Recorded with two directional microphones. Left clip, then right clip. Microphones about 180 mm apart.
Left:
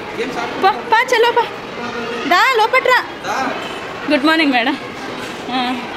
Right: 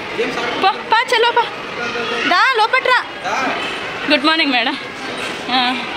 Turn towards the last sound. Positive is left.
turn(degrees=10)  # may be behind; listen again after turning